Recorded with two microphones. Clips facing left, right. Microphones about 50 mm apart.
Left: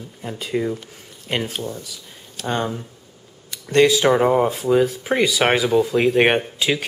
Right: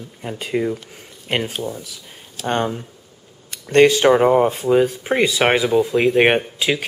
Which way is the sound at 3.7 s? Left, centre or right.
Right.